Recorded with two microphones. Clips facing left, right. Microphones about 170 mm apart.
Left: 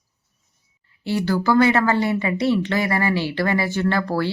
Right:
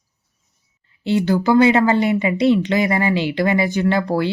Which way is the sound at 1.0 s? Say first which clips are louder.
Right 4 dB; 20° right (ahead or behind).